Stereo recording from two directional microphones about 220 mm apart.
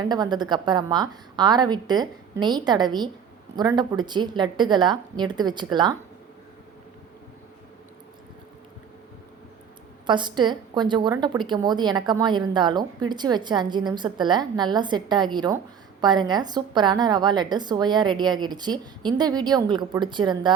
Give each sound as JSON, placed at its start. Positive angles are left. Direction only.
{"t": 0.0, "sound": "a woman's voice", "side_deg": -20}
{"t": 10.1, "sound": "a woman's voice", "side_deg": -20}